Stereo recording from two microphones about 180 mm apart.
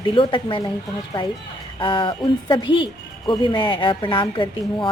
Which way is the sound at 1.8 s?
30° left (ahead or behind).